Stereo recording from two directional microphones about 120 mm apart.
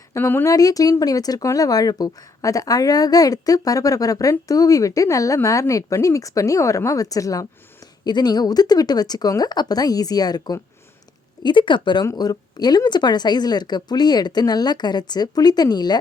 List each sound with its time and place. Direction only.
0.1 s speech: 20° left (ahead or behind)
0.5 s a woman's voice: 30° left (ahead or behind)